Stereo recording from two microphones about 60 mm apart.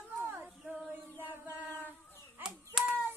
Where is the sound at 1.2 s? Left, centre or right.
Right.